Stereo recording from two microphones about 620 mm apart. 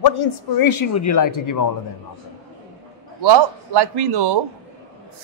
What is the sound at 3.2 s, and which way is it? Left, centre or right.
A man's voice, right.